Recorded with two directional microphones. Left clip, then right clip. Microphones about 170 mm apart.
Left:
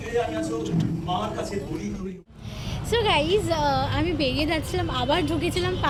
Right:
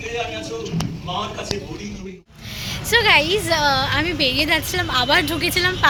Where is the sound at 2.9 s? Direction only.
Centre (ahead or behind).